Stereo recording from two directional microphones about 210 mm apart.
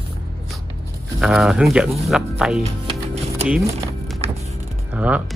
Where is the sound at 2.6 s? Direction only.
30° right (ahead or behind).